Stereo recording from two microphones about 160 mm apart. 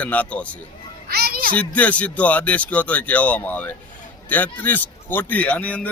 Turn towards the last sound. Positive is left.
turn(degrees=10)  # may be behind; listen again after turning